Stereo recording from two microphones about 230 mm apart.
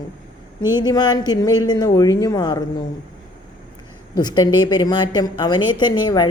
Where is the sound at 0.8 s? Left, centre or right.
Centre.